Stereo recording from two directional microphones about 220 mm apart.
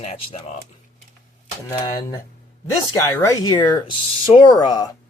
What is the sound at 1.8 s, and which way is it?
Speech, 20° left (ahead or behind).